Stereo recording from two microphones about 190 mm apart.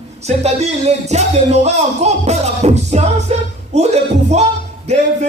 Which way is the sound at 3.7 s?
35° right (ahead or behind).